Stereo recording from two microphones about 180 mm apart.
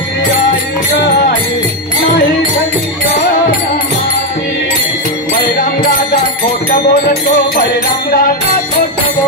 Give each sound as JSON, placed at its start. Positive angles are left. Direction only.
{"t": 6.7, "sound": "music", "side_deg": 55}